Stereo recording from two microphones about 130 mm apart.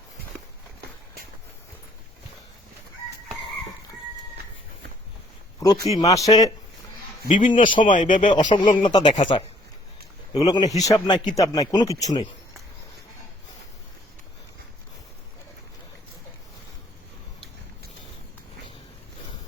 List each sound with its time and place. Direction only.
5.5 s speech: 30° left (ahead or behind)
7.3 s speech: 70° left (ahead or behind)
7.5 s a man's voice: 40° left (ahead or behind)
7.9 s speech: 80° left
8.3 s a man's voice: 40° left (ahead or behind)